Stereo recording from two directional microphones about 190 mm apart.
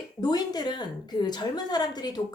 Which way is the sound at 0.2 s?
20° left (ahead or behind).